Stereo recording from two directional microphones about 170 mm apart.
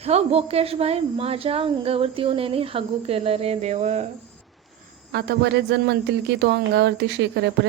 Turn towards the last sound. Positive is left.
turn(degrees=-90)